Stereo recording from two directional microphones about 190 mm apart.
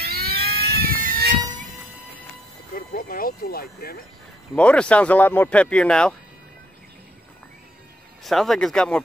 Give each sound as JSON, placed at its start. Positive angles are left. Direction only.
{"t": 0.0, "sound": "vehicle", "side_deg": -55}
{"t": 2.7, "sound": "speech", "side_deg": 45}
{"t": 4.6, "sound": "speech", "side_deg": 5}
{"t": 8.2, "sound": "speech", "side_deg": 0}